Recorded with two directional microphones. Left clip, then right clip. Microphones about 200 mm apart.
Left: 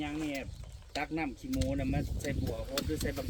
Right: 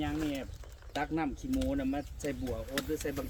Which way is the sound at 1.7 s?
15° right (ahead or behind).